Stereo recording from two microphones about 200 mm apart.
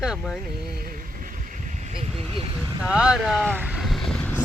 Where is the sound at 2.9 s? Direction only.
5° right (ahead or behind).